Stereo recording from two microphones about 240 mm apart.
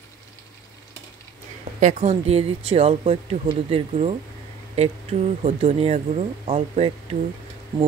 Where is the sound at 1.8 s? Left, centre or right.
Right.